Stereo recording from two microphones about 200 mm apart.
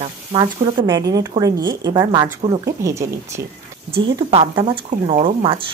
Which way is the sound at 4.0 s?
25° right (ahead or behind).